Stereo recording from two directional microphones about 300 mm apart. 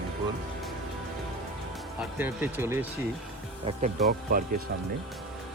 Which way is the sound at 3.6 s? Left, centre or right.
Right.